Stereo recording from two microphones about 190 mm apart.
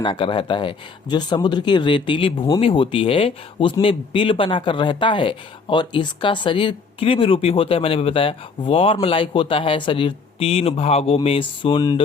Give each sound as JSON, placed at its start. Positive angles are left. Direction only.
{"t": 0.0, "sound": "speech", "side_deg": 25}